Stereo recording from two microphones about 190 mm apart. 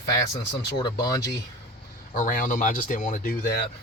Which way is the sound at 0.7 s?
20° left (ahead or behind).